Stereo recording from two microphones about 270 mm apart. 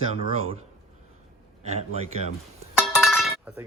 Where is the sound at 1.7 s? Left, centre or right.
Right.